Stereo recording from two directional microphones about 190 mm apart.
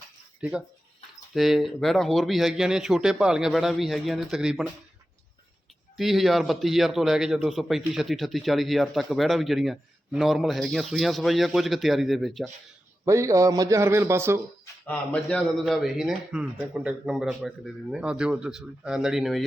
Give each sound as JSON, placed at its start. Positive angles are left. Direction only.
{"t": 1.3, "sound": "a man's voice", "side_deg": 0}
{"t": 6.0, "sound": "a man's voice", "side_deg": 0}
{"t": 13.1, "sound": "a man's voice", "side_deg": -15}
{"t": 14.8, "sound": "a man's voice", "side_deg": 5}